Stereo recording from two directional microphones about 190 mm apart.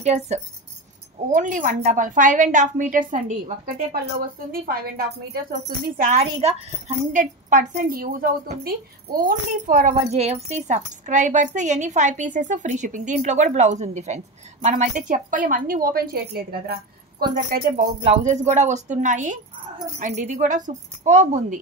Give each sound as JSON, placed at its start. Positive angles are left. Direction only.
{"t": 0.0, "sound": "a woman's voice", "side_deg": -35}
{"t": 18.0, "sound": "a woman's voice", "side_deg": -35}